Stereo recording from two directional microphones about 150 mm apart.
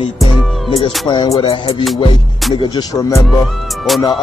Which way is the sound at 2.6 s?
25° left (ahead or behind).